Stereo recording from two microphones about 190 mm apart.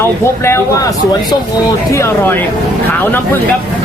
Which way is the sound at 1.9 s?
15° left (ahead or behind).